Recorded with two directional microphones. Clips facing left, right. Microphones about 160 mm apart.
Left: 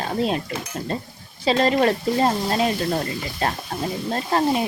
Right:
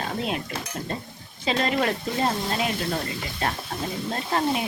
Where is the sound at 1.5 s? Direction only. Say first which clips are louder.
Left 6 dB; 35° left (ahead or behind).